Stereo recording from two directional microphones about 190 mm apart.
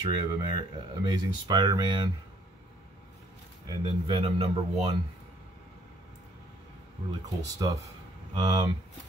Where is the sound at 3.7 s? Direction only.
25° right (ahead or behind).